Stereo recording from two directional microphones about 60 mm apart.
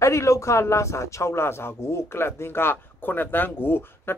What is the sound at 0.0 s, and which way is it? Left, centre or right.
A man's voice, left.